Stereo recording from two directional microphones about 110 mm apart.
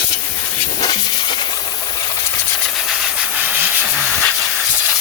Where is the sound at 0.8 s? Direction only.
40° left (ahead or behind).